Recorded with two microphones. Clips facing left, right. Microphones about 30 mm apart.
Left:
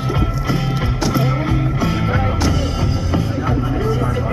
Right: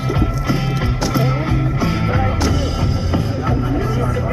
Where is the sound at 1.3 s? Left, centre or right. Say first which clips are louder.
Even; right.